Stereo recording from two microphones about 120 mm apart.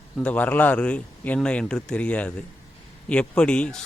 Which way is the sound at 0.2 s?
10° left (ahead or behind).